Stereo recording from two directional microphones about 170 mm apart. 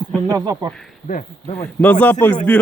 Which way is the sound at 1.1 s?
45° left (ahead or behind).